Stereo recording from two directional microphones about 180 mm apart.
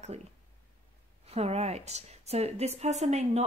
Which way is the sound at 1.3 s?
35° right (ahead or behind).